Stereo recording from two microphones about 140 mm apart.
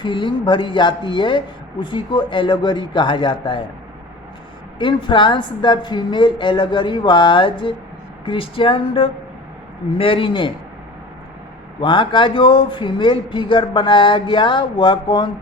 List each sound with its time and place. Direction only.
0.0 s speech: 35° left (ahead or behind)
4.8 s speech: 35° left (ahead or behind)
11.8 s speech: 35° left (ahead or behind)